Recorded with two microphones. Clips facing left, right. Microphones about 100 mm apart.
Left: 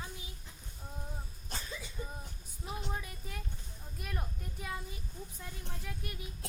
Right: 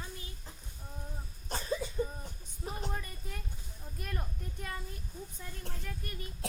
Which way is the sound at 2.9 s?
5° left (ahead or behind).